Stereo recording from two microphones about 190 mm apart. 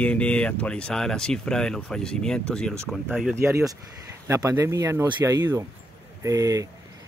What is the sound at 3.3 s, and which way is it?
Speech, 15° right (ahead or behind).